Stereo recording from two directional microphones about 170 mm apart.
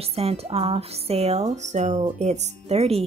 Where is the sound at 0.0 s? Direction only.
35° right (ahead or behind).